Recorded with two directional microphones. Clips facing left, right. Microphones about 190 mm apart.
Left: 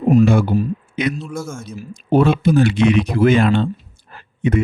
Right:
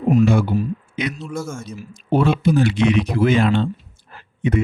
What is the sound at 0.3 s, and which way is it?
Speech, 50° left (ahead or behind).